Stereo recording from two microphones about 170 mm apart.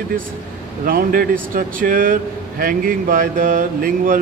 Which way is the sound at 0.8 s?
55° right (ahead or behind).